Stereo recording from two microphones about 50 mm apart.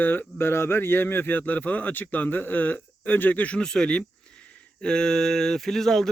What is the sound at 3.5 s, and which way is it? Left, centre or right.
Speech, centre.